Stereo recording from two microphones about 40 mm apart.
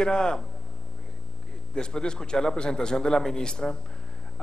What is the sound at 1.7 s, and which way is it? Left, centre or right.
A man's voice, centre.